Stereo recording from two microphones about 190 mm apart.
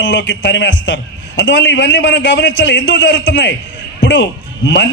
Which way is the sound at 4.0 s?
70° left (ahead or behind).